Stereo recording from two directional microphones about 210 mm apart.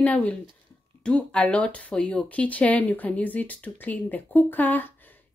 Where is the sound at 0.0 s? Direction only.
5° left (ahead or behind).